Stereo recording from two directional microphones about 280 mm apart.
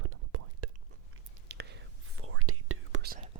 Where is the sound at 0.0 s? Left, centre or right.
Right.